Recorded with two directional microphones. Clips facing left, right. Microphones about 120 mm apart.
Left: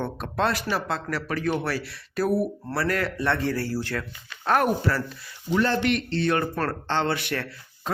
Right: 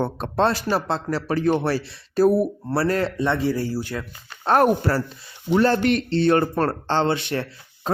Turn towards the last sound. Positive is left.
turn(degrees=-25)  # may be behind; listen again after turning